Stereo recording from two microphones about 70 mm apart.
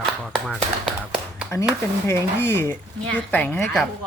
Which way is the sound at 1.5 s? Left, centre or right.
Left.